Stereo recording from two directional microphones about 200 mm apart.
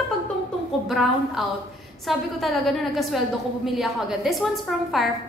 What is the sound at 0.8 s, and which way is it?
A woman's voice, centre (ahead or behind).